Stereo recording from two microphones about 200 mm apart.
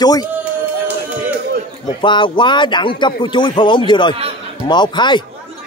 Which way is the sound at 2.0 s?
25° left (ahead or behind).